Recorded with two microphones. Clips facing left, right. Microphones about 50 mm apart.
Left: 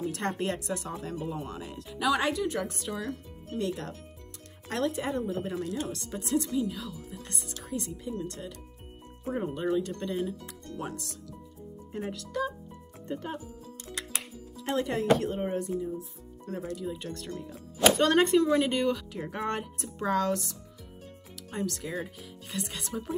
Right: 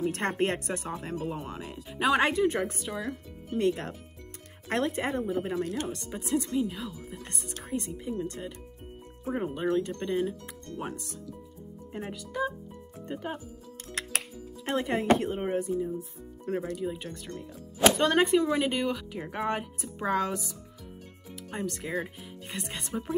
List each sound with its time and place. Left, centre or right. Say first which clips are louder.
0.0 s speech: right 3 dB; right
1.3 s speech: even; right
2.0 s speech: right 3 dB; right
2.7 s speech: even; centre
3.5 s speech: right 5 dB; right
5.9 s speech: right 1 dB; centre
14.6 s speech: even; right
16.0 s speech: right 2 dB; right
16.8 s speech: right 1 dB; centre